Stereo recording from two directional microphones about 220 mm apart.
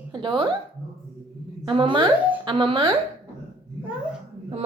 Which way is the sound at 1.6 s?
20° right (ahead or behind).